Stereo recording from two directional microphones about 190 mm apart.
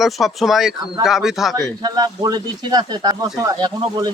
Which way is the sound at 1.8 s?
20° right (ahead or behind).